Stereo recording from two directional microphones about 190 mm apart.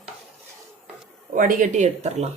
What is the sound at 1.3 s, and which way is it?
Speech, 45° right (ahead or behind).